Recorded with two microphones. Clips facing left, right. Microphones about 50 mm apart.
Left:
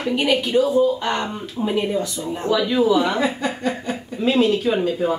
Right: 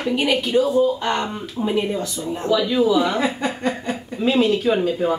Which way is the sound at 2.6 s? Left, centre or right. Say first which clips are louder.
Left 2 dB; centre.